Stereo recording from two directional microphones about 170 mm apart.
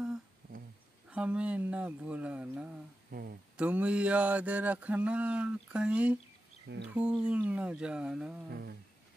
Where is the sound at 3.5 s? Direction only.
10° right (ahead or behind).